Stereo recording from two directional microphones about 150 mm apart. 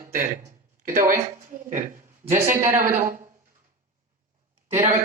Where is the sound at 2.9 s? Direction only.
60° right (ahead or behind).